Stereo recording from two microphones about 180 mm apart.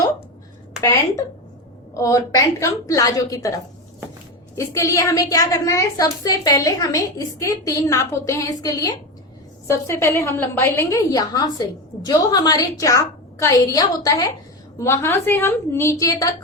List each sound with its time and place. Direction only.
0.8 s a woman's voice: 15° left (ahead or behind)